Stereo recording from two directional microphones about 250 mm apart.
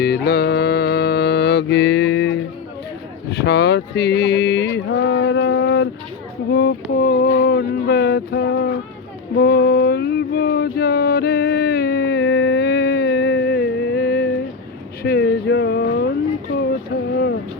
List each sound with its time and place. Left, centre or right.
0.0 s mantra: left
3.2 s speech: left
9.3 s a sound: left